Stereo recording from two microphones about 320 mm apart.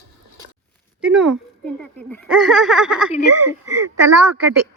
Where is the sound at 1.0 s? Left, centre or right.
Centre.